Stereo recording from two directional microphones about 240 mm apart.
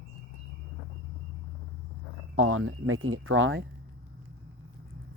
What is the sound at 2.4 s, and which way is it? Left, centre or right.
Speech, right.